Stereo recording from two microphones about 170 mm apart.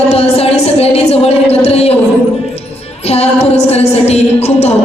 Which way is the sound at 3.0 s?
35° left (ahead or behind).